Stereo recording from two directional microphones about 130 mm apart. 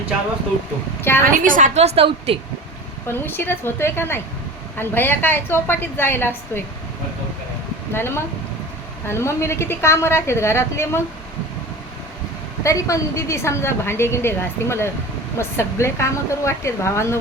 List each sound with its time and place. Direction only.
1.2 s a woman's voice: 85° right; by 2.0 s 55° right (ahead or behind)
2.0 s a woman's voice: 45° right (ahead or behind)
3.1 s a woman's voice: 15° left (ahead or behind)
7.9 s a woman's voice: 20° left (ahead or behind)
12.6 s a woman's voice: 25° left (ahead or behind)